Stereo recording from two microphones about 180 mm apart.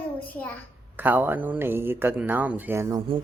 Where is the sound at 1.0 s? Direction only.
10° right (ahead or behind).